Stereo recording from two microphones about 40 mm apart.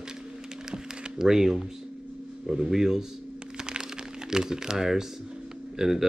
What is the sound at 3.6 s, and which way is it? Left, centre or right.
Crack, centre.